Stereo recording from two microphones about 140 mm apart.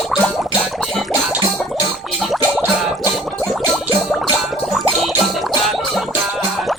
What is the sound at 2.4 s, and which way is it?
Music, 15° right (ahead or behind).